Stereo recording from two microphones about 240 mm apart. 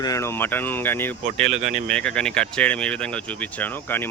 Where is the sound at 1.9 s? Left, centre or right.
Centre.